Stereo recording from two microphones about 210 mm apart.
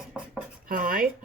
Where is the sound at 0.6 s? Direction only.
40° right (ahead or behind).